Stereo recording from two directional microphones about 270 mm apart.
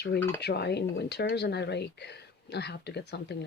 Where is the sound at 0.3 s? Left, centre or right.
Left.